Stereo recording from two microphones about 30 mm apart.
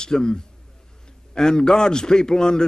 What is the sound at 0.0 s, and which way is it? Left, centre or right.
A man's voice, left.